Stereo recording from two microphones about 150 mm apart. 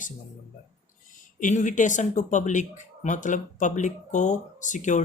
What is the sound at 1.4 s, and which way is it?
Speech, 60° left (ahead or behind).